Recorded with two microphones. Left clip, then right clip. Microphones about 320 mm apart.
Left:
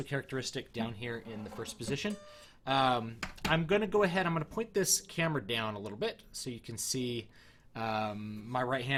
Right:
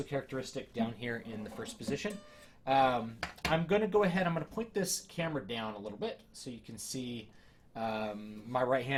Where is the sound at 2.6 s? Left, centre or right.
Left.